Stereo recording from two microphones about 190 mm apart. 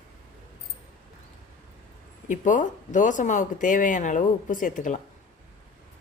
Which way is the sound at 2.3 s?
40° left (ahead or behind).